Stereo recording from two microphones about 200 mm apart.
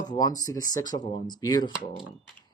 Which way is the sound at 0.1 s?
20° left (ahead or behind).